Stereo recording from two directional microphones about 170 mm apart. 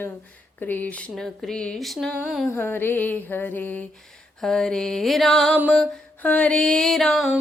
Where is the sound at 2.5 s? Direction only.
10° left (ahead or behind).